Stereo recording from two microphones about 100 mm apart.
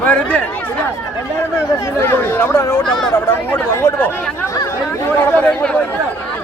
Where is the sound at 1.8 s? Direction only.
25° left (ahead or behind).